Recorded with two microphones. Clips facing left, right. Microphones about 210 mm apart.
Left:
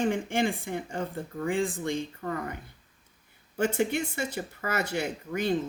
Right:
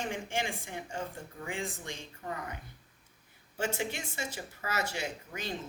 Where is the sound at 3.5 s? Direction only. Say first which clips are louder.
Left 8 dB; 55° left (ahead or behind).